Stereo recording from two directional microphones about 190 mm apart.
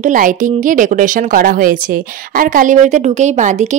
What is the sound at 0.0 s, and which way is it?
A woman's voice, 45° right (ahead or behind).